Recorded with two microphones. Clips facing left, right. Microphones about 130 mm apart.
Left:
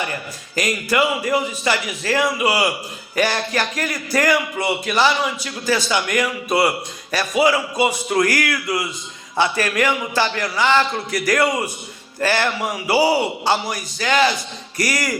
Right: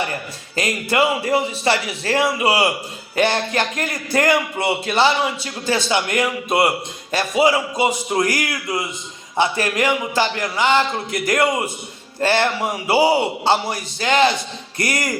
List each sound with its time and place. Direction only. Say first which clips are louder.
0.0 s speech: right 1 dB; 30° right (ahead or behind)